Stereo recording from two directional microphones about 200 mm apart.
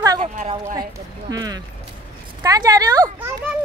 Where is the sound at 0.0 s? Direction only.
20° right (ahead or behind).